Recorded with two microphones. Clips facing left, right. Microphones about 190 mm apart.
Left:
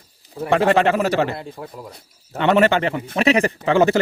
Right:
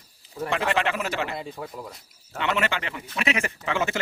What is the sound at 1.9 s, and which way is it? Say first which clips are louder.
Speech: left 4 dB; 35° left (ahead or behind).